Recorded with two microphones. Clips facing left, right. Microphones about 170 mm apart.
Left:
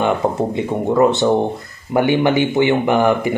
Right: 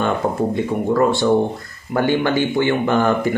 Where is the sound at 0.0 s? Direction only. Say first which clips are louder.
Left 2 dB; 20° left (ahead or behind).